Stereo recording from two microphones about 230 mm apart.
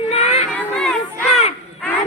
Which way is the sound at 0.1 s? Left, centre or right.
Left.